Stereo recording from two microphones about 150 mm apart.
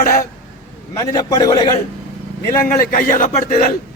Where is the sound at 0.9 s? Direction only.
25° left (ahead or behind).